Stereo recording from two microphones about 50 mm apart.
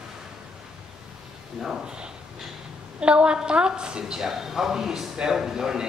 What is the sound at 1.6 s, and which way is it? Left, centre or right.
A woman's voice, centre.